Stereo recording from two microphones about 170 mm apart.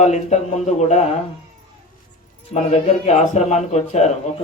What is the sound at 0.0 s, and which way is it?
Speech, 40° left (ahead or behind).